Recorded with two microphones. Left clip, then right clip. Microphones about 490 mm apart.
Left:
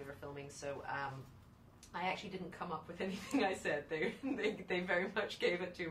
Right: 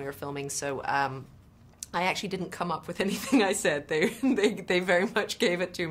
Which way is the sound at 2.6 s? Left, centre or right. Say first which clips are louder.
Right 12 dB; right.